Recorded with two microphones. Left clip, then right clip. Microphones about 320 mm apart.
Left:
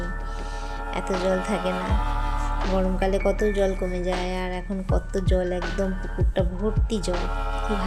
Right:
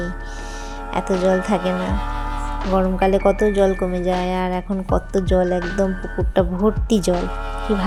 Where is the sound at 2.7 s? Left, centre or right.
Centre.